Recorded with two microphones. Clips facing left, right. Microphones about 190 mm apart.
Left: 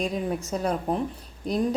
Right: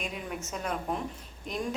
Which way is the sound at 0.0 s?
35° left (ahead or behind).